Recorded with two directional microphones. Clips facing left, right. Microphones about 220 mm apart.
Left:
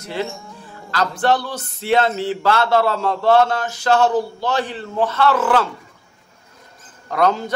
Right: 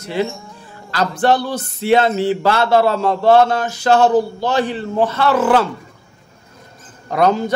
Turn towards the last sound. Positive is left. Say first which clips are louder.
# right 3 dB
turn(degrees=-10)  # may be behind; listen again after turning